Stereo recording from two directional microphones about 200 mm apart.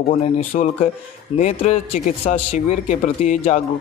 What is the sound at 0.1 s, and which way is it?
A man's voice, 30° left (ahead or behind).